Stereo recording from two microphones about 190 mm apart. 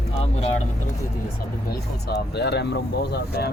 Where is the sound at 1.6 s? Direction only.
60° left (ahead or behind).